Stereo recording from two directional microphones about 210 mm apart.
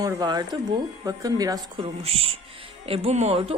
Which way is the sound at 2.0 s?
30° right (ahead or behind).